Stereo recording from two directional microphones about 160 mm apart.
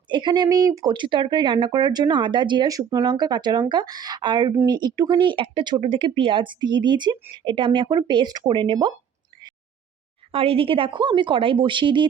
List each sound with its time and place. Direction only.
0.1 s speech: 30° right (ahead or behind)
10.3 s a woman's voice: 35° right (ahead or behind)